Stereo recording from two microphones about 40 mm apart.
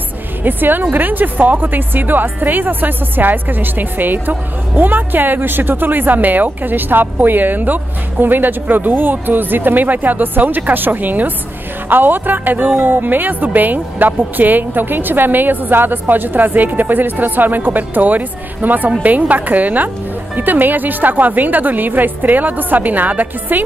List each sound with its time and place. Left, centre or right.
0.4 s speech: right